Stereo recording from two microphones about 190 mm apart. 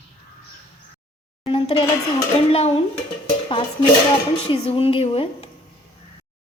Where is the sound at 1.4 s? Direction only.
30° left (ahead or behind).